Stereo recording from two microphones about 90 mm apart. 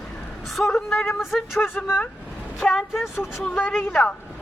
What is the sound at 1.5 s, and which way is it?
Speech, 25° left (ahead or behind).